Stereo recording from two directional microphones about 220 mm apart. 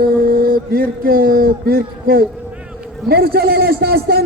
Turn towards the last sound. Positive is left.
turn(degrees=-45)  # may be behind; listen again after turning